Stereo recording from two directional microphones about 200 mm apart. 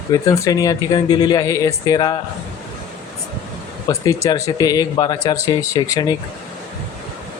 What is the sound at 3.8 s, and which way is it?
Speech, 15° left (ahead or behind).